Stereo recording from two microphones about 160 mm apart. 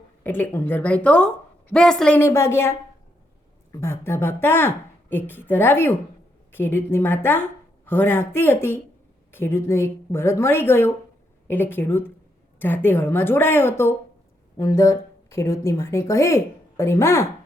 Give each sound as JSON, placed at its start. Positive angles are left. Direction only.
{"t": 0.2, "sound": "a woman's voice", "side_deg": 10}